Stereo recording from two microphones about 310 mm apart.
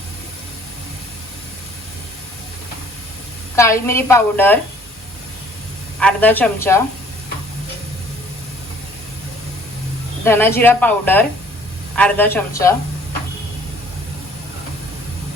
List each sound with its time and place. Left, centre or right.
3.5 s a woman's voice: centre
6.0 s a woman's voice: centre
10.2 s a woman's voice: centre